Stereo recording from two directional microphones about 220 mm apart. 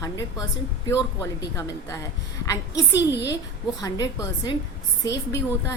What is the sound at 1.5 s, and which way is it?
Speech, 15° left (ahead or behind).